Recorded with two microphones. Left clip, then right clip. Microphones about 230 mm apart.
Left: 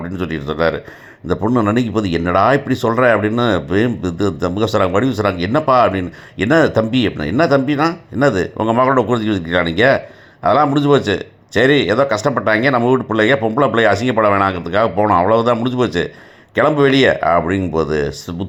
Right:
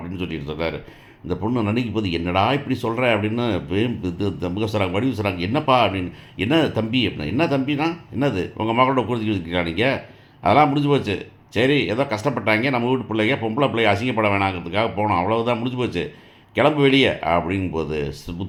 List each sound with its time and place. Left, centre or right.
0.2 s speech: left